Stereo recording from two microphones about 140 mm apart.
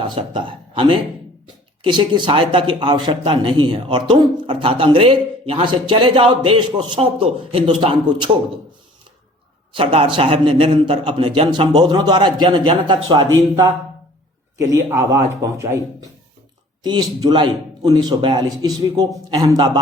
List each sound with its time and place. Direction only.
0.0 s a man's voice: 35° right (ahead or behind)
9.7 s speech: 40° right (ahead or behind)
14.6 s speech: 20° right (ahead or behind)
16.8 s speech: 30° right (ahead or behind)